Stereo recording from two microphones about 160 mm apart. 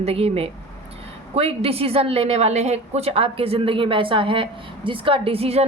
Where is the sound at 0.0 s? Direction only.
40° right (ahead or behind).